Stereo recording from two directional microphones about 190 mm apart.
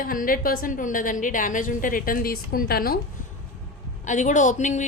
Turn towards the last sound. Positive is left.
turn(degrees=40)  # may be behind; listen again after turning